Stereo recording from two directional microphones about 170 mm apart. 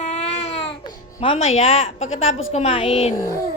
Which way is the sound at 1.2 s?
35° left (ahead or behind).